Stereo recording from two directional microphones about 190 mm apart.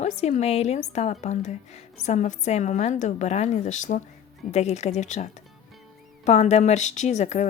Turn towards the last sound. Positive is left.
turn(degrees=35)  # may be behind; listen again after turning